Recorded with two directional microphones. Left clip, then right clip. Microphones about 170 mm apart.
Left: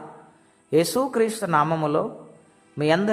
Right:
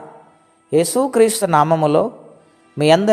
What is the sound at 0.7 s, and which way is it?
Speech, 15° right (ahead or behind).